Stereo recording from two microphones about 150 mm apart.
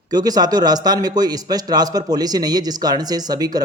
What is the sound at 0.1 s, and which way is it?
A man's voice, 25° right (ahead or behind).